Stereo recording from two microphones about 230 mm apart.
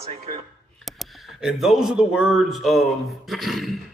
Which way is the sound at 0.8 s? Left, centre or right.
Centre.